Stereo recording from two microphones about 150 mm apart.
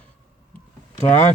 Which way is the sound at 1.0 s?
50° left (ahead or behind).